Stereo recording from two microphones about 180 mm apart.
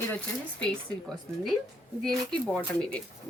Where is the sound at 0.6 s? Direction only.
5° left (ahead or behind).